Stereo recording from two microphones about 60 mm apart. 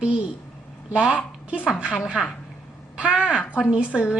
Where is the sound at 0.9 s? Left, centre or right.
Centre.